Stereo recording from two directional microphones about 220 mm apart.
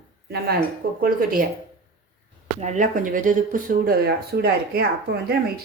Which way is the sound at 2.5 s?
30° right (ahead or behind).